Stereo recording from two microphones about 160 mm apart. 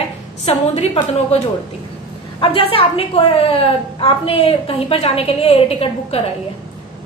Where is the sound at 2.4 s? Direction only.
35° left (ahead or behind).